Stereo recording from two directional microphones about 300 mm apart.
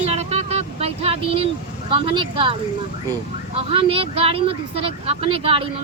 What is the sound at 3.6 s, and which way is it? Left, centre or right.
Speech, centre.